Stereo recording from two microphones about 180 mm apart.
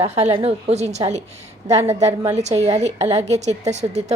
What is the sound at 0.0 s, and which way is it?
A woman's voice, 35° right (ahead or behind).